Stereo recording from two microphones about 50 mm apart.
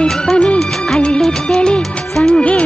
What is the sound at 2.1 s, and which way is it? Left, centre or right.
Music, centre.